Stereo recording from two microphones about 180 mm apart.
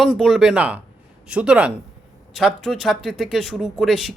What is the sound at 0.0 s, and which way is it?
Speech, centre (ahead or behind).